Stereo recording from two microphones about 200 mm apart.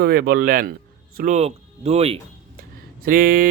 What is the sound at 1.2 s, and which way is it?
Speech, 35° right (ahead or behind).